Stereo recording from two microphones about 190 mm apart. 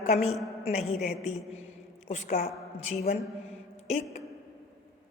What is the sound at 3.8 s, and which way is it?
Speech, 40° left (ahead or behind).